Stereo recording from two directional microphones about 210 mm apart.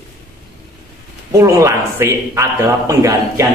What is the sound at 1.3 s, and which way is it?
A man's voice, 15° right (ahead or behind).